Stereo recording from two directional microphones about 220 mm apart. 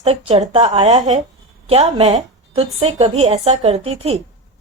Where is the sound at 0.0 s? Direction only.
25° right (ahead or behind).